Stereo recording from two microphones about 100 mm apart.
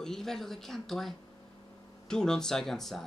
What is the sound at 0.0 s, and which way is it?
Speech, 5° left (ahead or behind).